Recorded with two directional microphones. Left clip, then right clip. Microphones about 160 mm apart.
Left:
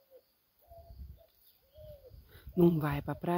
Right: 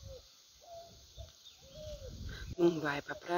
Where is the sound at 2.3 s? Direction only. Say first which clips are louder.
Left 2 dB; 15° left (ahead or behind).